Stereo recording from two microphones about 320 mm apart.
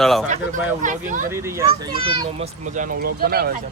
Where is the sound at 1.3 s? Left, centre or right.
Centre; by 3.6 s right.